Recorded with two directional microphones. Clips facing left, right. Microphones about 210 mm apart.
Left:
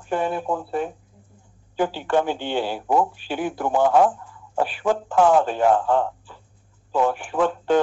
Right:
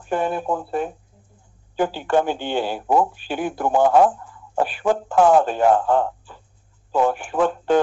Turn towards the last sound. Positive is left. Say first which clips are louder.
# right 1 dB
turn(degrees=-45)  # may be behind; listen again after turning